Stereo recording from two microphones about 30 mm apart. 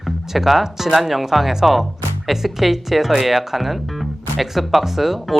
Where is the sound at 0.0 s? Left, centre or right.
Centre.